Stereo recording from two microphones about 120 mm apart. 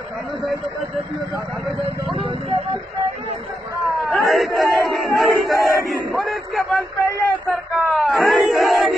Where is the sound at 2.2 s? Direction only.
50° right (ahead or behind).